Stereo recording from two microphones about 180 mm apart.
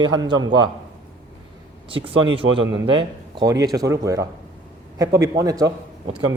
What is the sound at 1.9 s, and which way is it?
Speech, 30° right (ahead or behind).